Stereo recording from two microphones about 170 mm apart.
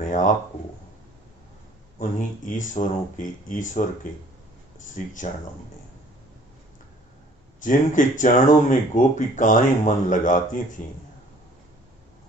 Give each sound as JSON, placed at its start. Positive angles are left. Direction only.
{"t": 0.0, "sound": "a sound", "side_deg": 50}
{"t": 2.0, "sound": "speech", "side_deg": 50}
{"t": 7.6, "sound": "speech", "side_deg": 50}